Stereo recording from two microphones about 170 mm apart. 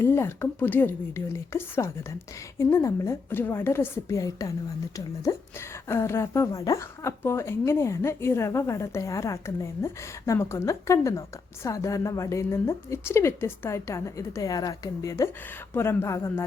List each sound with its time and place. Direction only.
0.0 s a woman's voice: 15° left (ahead or behind)